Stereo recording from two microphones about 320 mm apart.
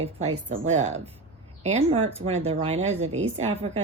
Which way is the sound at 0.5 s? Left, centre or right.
Right.